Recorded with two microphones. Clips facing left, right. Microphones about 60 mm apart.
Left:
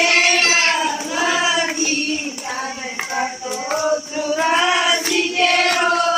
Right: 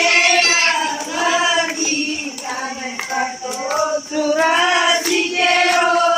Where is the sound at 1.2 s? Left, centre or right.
Centre.